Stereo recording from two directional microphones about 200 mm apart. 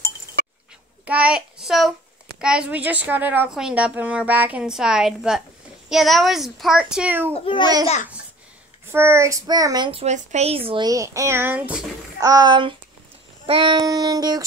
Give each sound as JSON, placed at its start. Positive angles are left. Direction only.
{"t": 1.0, "sound": "a child's voice", "side_deg": -5}
{"t": 7.4, "sound": "a child's voice", "side_deg": 25}
{"t": 8.8, "sound": "a child's voice", "side_deg": -10}
{"t": 12.3, "sound": "child singing", "side_deg": -20}